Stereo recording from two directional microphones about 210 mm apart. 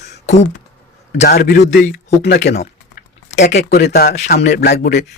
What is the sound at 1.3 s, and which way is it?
Speech, 45° left (ahead or behind).